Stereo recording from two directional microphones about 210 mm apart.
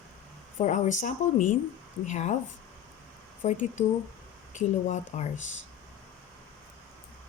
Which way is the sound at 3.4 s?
35° left (ahead or behind).